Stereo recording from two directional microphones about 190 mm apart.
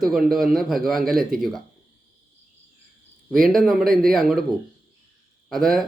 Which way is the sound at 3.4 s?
Centre (ahead or behind).